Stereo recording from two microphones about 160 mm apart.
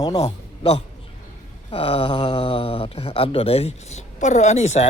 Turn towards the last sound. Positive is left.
turn(degrees=45)  # may be behind; listen again after turning